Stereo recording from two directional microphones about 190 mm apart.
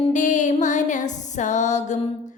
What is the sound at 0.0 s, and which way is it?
Music, 40° left (ahead or behind).